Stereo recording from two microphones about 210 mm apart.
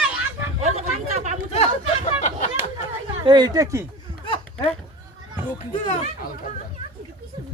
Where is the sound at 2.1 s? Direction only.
35° left (ahead or behind).